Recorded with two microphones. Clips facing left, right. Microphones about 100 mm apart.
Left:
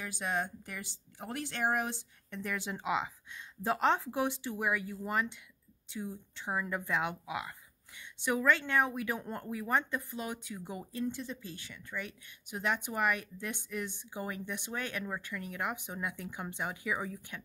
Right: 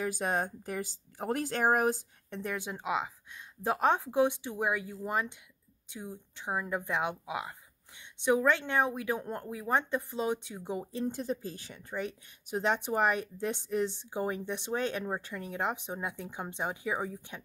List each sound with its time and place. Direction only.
0.0 s speech: 40° right (ahead or behind)
2.4 s speech: 15° right (ahead or behind)